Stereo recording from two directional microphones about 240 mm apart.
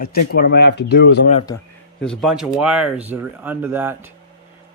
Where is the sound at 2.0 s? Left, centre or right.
Centre.